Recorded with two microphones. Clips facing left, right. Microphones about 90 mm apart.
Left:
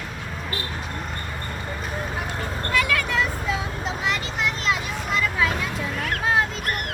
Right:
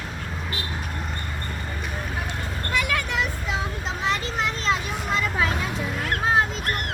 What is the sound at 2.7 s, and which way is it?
Vehicle, 25° right (ahead or behind).